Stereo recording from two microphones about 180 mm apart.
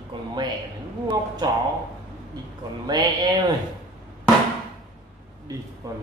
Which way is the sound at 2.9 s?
25° right (ahead or behind).